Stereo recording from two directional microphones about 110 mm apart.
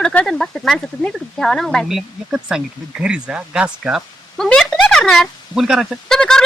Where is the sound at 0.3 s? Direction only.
5° left (ahead or behind).